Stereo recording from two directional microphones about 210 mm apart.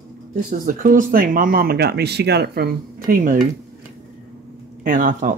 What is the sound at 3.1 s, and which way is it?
Speech, 40° right (ahead or behind).